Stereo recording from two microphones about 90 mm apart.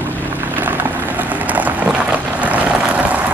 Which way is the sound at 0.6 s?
20° right (ahead or behind).